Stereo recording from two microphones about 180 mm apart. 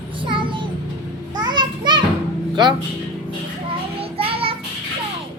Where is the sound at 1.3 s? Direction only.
25° right (ahead or behind).